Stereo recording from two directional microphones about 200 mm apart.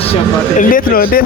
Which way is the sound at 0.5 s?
45° left (ahead or behind).